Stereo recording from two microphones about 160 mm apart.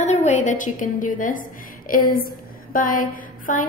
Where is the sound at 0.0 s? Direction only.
45° left (ahead or behind).